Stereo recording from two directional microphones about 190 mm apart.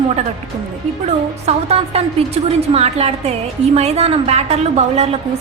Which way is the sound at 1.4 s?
35° right (ahead or behind).